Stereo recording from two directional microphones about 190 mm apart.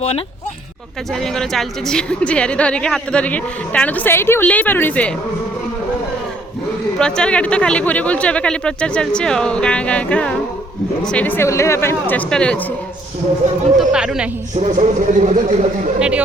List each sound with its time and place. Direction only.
1.2 s a woman's voice: centre (ahead or behind)
7.0 s a woman's voice: 5° left (ahead or behind)
13.7 s speech: 5° right (ahead or behind)
14.5 s speech: 35° right (ahead or behind)
16.0 s speech: 5° right (ahead or behind)